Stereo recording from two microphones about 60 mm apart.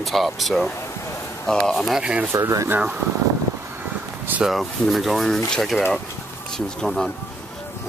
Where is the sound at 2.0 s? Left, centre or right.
Centre.